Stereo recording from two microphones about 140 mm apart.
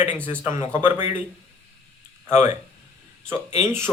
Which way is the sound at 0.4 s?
15° right (ahead or behind).